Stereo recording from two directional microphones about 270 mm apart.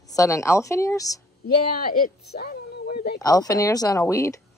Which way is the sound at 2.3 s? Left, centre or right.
Left.